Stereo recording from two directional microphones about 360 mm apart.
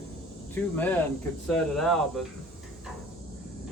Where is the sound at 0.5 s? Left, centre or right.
Centre.